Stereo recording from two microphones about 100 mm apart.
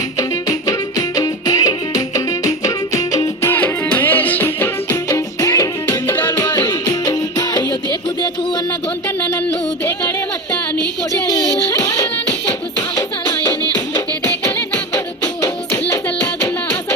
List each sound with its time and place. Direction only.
0.2 s music: 35° left (ahead or behind)
3.5 s music: 15° left (ahead or behind); by 8.6 s 50° left (ahead or behind)
9.8 s music: 20° left (ahead or behind)
11.3 s music: 30° left (ahead or behind)
15.4 s music: 20° left (ahead or behind)